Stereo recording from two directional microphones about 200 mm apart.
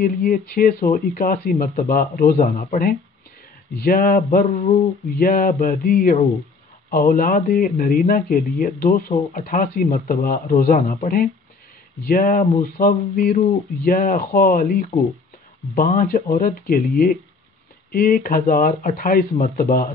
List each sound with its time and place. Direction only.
0.0 s speech: 45° left (ahead or behind)
4.3 s a sound: 40° left (ahead or behind)
5.2 s speech: 45° left (ahead or behind)
12.7 s speech: 50° left (ahead or behind)